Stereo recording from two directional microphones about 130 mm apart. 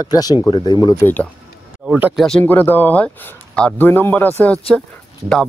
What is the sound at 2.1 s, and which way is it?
Speech, 5° left (ahead or behind).